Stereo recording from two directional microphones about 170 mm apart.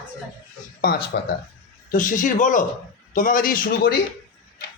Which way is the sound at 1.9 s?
50° left (ahead or behind).